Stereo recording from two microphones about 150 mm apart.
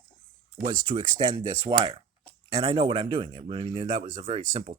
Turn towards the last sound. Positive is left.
turn(degrees=-40)  # may be behind; listen again after turning